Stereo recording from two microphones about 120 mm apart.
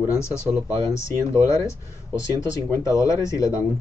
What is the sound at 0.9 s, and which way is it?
Speech, 25° left (ahead or behind).